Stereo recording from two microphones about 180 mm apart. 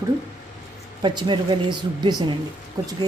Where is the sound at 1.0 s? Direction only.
25° right (ahead or behind).